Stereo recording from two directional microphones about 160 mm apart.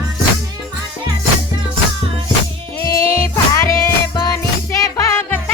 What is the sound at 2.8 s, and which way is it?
Music, 15° left (ahead or behind).